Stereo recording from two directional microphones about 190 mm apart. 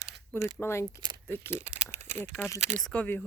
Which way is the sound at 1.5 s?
35° right (ahead or behind).